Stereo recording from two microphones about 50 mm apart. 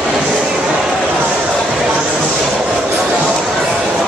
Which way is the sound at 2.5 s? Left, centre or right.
Centre.